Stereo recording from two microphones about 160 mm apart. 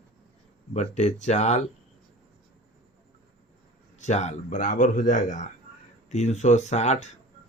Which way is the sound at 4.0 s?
45° left (ahead or behind).